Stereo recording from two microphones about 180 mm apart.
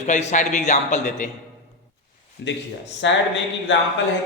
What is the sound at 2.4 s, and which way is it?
Speech, 75° left (ahead or behind).